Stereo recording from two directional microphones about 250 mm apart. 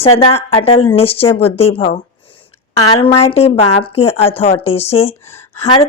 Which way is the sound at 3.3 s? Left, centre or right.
Left.